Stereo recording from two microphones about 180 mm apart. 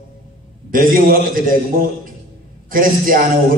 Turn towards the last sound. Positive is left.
turn(degrees=-50)  # may be behind; listen again after turning